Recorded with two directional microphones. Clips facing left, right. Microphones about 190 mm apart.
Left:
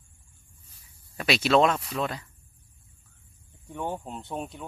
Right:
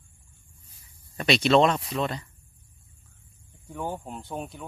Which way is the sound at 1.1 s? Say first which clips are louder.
Right 2 dB; 5° left (ahead or behind).